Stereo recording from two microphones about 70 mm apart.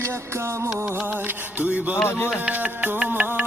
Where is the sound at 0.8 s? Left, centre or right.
Right.